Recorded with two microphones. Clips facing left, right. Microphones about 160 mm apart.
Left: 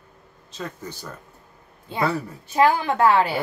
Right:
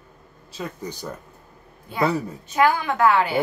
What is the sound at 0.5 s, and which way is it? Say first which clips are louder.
Speech: right 2 dB; 10° right (ahead or behind).